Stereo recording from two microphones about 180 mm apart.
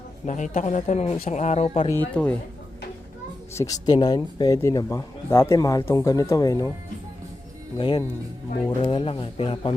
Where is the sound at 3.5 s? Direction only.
15° left (ahead or behind).